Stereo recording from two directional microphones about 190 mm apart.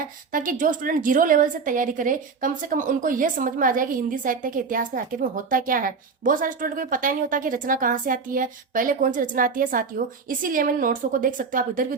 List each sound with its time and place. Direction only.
0.0 s a woman's voice: 45° right (ahead or behind)